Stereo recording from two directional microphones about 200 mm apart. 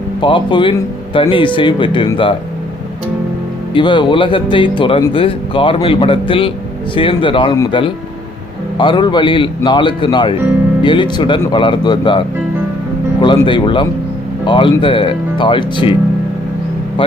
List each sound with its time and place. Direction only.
0.2 s speech: 25° left (ahead or behind)
3.8 s speech: 25° left (ahead or behind)
13.2 s speech: 25° left (ahead or behind)